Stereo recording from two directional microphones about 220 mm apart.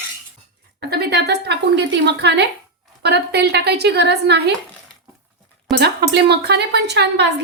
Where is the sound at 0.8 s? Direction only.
45° right (ahead or behind).